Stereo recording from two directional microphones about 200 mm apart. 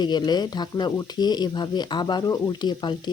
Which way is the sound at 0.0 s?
20° left (ahead or behind).